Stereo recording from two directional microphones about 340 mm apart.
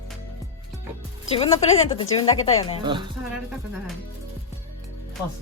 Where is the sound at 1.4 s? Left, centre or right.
Centre.